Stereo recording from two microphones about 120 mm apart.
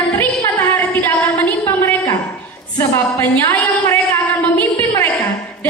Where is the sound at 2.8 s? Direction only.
20° left (ahead or behind).